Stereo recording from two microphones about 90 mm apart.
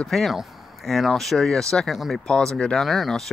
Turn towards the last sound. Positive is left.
turn(degrees=0)  # may be behind; listen again after turning